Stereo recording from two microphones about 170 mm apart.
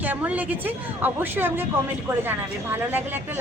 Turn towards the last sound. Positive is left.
turn(degrees=-15)  # may be behind; listen again after turning